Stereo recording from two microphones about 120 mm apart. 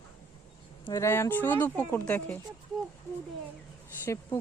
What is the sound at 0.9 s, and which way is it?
Speech, 25° left (ahead or behind).